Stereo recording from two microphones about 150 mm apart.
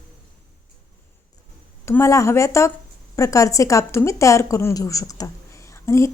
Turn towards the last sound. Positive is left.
turn(degrees=20)  # may be behind; listen again after turning